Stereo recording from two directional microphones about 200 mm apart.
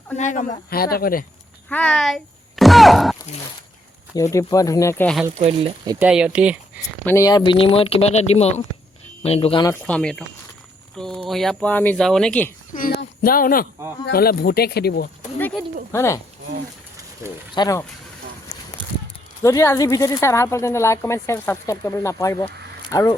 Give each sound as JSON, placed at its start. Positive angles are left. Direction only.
{"t": 0.2, "sound": "speech", "side_deg": 35}
{"t": 1.7, "sound": "speech", "side_deg": 5}
{"t": 4.1, "sound": "speech", "side_deg": 15}
{"t": 5.4, "sound": "speech", "side_deg": -30}
{"t": 5.9, "sound": "speech", "side_deg": -5}
{"t": 7.0, "sound": "speech", "side_deg": 15}
{"t": 9.8, "sound": "speech", "side_deg": 5}
{"t": 13.0, "sound": "a sound", "side_deg": 45}
{"t": 14.0, "sound": "speech", "side_deg": 50}
{"t": 15.9, "sound": "speech", "side_deg": 15}
{"t": 17.5, "sound": "speech", "side_deg": 20}
{"t": 19.4, "sound": "speech", "side_deg": 15}